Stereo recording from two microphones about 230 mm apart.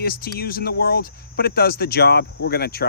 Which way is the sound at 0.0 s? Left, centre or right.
Left.